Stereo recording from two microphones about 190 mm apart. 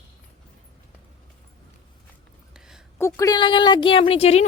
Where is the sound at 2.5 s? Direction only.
5° right (ahead or behind).